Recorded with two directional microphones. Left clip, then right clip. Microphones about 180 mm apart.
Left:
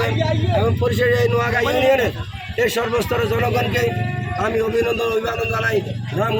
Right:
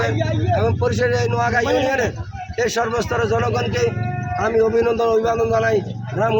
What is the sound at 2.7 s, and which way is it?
A man's voice, centre (ahead or behind).